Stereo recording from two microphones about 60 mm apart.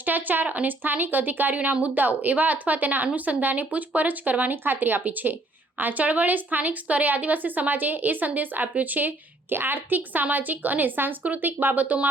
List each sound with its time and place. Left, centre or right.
0.0 s a woman's voice: right